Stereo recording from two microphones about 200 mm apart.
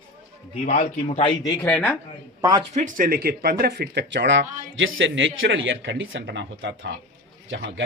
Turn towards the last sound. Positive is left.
turn(degrees=-60)  # may be behind; listen again after turning